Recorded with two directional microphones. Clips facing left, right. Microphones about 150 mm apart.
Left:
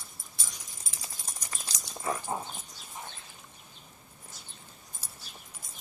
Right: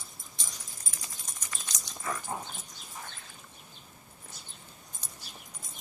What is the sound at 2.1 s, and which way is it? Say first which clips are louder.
Dog: left 3 dB; 30° left (ahead or behind).